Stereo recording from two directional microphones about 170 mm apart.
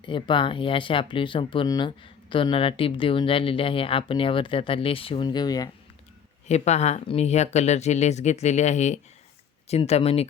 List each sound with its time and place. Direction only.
0.0 s speech: 30° left (ahead or behind)
6.5 s speech: 40° left (ahead or behind)